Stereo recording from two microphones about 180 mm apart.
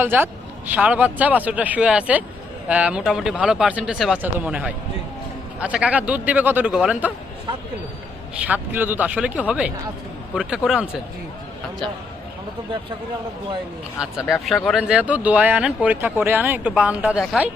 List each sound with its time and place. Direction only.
0.0 s speech: 10° right (ahead or behind)
8.4 s speech: 10° right (ahead or behind)
14.0 s speech: 5° right (ahead or behind)